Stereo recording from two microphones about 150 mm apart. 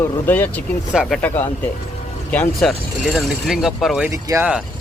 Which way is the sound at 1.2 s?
10° left (ahead or behind).